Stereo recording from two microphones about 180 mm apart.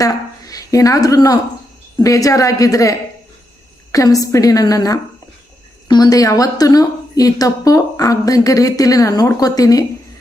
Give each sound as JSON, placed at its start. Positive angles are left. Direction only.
{"t": 0.0, "sound": "a woman's voice", "side_deg": 20}
{"t": 3.9, "sound": "a woman's voice", "side_deg": 20}